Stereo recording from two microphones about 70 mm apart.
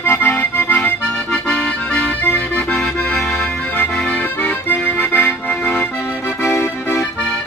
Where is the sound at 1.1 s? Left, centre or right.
Centre.